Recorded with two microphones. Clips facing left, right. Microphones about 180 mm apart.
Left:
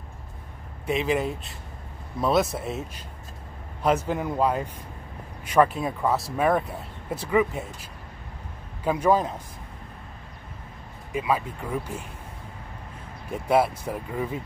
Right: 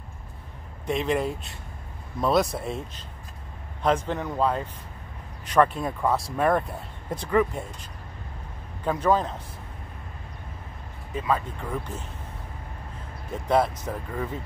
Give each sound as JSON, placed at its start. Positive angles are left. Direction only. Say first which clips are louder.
{"t": 0.8, "sound": "speech", "louder": "even", "side_deg": 5}
{"t": 3.8, "sound": "speech", "louder": "left 1 dB", "side_deg": 5}
{"t": 8.8, "sound": "speech", "louder": "left 1 dB", "side_deg": 10}
{"t": 11.1, "sound": "speech", "louder": "left 1 dB", "side_deg": 10}
{"t": 13.5, "sound": "speech", "louder": "left 1 dB", "side_deg": 10}